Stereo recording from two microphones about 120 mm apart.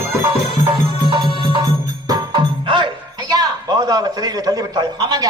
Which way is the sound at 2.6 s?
45° right (ahead or behind).